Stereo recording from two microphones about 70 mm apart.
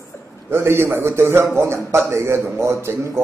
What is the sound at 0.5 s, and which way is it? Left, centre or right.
A man's voice, right.